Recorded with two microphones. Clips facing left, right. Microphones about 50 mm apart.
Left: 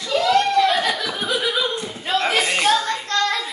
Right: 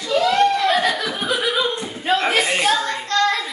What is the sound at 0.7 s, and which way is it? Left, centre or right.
Chuckle, centre.